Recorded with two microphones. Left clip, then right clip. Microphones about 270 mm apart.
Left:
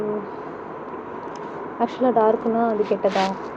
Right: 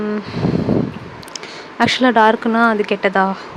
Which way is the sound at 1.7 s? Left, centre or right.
Right.